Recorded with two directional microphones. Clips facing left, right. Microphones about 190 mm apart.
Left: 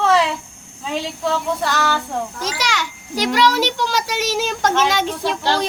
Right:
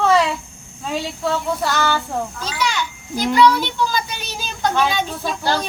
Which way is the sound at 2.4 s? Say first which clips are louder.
Even; 90° left.